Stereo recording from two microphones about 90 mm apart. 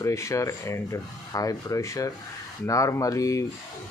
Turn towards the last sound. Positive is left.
turn(degrees=35)  # may be behind; listen again after turning